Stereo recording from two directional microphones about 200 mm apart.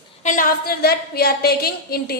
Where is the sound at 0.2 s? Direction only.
40° left (ahead or behind).